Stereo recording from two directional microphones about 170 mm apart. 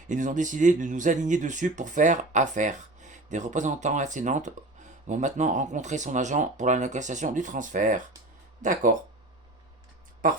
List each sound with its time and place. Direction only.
0.1 s speech: 50° right (ahead or behind)
10.2 s speech: 55° right (ahead or behind)